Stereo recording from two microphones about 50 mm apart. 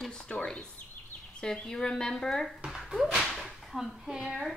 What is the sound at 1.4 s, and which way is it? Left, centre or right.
Speech, centre.